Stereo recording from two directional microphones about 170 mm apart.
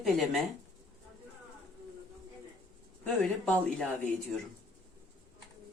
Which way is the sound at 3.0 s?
5° left (ahead or behind).